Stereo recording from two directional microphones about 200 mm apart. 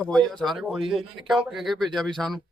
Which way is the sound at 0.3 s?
Centre (ahead or behind).